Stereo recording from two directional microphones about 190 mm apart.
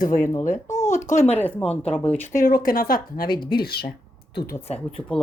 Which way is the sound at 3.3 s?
25° left (ahead or behind).